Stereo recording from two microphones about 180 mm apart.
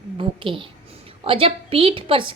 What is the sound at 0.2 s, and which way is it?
A woman's voice, 30° right (ahead or behind).